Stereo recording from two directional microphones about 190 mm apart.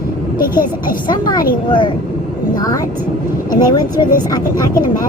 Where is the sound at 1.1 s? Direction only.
20° left (ahead or behind).